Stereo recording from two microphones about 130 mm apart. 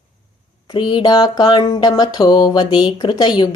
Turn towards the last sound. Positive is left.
turn(degrees=35)  # may be behind; listen again after turning